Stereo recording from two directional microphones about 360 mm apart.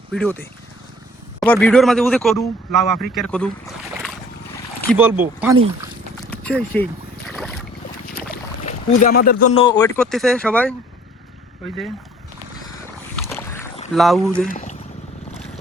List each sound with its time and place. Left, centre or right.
0.1 s speech: centre
4.9 s speech: centre
7.3 s boat: centre
8.0 s boat: left
9.6 s speech: centre
13.1 s rowboat: centre
14.4 s speech: left